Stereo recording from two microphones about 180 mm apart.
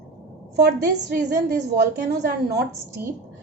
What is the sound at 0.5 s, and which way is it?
A woman's voice, 65° right (ahead or behind).